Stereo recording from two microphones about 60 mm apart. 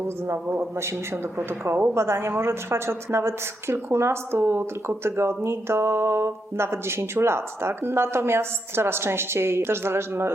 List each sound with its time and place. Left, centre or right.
0.6 s a woman's voice: right
2.0 s a woman's voice: right